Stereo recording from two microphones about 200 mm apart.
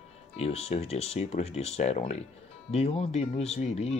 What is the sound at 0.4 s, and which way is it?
Speech, 30° left (ahead or behind).